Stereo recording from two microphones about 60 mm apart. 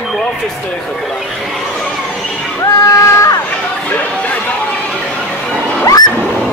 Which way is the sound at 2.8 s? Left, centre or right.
Left.